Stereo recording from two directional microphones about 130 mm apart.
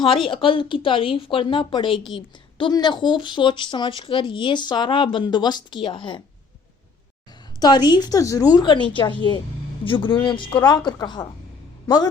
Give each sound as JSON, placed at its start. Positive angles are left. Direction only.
{"t": 0.3, "sound": "speech", "side_deg": 40}
{"t": 7.6, "sound": "speech", "side_deg": 35}